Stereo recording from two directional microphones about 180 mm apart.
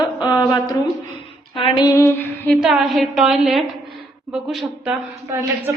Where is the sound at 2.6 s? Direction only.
Centre (ahead or behind).